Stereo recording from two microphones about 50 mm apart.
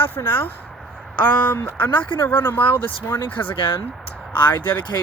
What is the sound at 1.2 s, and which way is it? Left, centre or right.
Speech, left.